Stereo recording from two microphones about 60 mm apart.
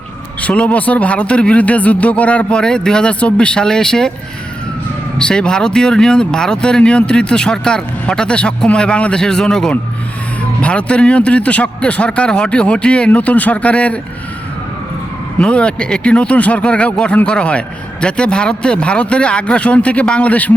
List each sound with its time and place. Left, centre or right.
0.4 s speech: left
5.1 s speech: centre
15.4 s speech: centre